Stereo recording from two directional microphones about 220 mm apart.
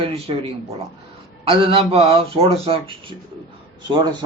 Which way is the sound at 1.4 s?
25° right (ahead or behind).